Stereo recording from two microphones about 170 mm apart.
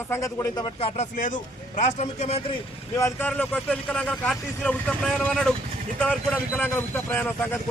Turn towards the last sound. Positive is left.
turn(degrees=10)  # may be behind; listen again after turning